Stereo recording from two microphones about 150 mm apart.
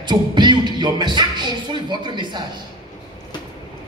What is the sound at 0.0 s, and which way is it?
Music, 30° right (ahead or behind).